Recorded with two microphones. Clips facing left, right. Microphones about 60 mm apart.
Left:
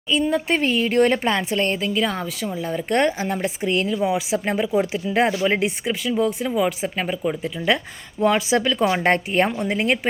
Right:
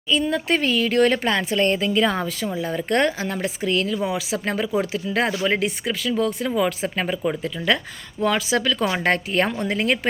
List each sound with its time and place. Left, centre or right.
0.1 s speech: centre
1.4 s a woman's voice: centre
2.9 s speech: centre
3.7 s speech: left
3.9 s speech: centre
7.4 s speech: centre